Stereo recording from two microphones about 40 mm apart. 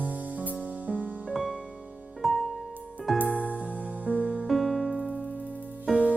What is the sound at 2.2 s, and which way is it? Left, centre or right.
Music, centre.